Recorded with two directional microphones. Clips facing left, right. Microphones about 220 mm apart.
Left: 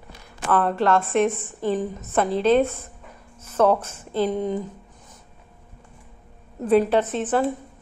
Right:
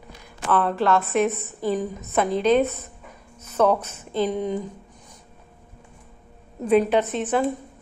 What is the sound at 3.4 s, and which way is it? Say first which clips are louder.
A woman's voice: left 1 dB; 5° left (ahead or behind).